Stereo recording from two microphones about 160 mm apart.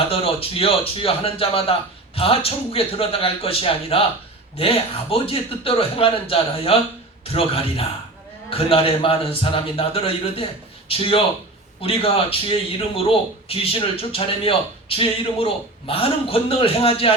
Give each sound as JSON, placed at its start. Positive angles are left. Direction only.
{"t": 0.1, "sound": "a man's voice", "side_deg": 35}